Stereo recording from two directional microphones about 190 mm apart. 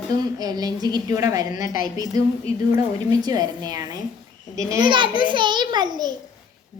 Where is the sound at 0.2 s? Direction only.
20° right (ahead or behind).